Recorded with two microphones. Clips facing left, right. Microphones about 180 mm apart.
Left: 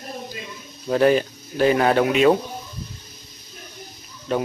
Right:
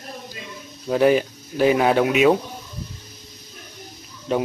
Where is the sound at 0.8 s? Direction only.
10° right (ahead or behind).